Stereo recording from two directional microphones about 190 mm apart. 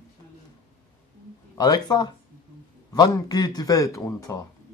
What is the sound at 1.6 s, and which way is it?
A man's voice, 20° left (ahead or behind).